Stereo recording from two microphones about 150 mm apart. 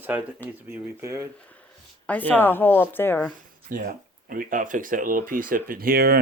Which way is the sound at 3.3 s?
70° right (ahead or behind).